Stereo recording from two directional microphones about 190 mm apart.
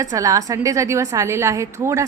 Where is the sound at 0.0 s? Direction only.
15° right (ahead or behind).